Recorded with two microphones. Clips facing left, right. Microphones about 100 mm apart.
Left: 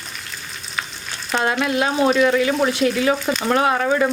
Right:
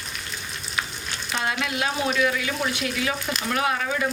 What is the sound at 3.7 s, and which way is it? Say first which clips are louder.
Speech: left 8 dB; 50° left (ahead or behind).